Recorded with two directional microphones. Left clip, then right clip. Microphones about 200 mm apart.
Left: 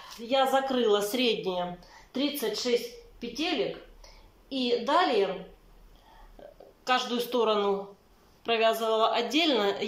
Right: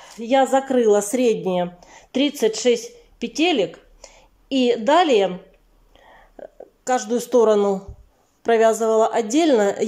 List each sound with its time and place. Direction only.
0.3 s a woman's voice: 30° right (ahead or behind)
6.8 s a woman's voice: 40° right (ahead or behind)